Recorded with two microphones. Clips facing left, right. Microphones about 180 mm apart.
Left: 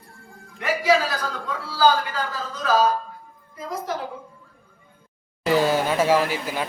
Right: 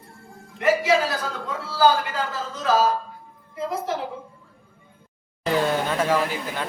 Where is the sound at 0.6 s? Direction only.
25° right (ahead or behind).